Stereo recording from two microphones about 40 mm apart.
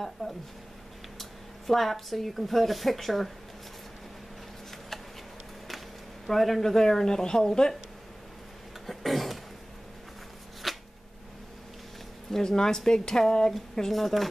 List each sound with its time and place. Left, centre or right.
0.2 s a woman's voice: centre
1.7 s a woman's voice: centre
6.2 s a woman's voice: centre
8.8 s a sound: centre
10.6 s a sound: centre
12.3 s a woman's voice: centre